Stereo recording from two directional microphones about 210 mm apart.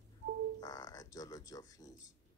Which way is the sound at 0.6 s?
15° left (ahead or behind).